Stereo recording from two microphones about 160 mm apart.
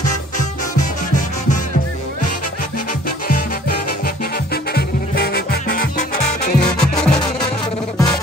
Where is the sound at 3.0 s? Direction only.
65° left (ahead or behind).